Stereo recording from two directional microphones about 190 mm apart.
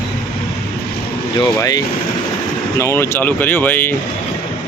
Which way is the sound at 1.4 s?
20° left (ahead or behind).